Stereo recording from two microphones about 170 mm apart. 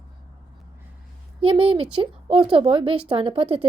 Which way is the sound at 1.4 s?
30° right (ahead or behind).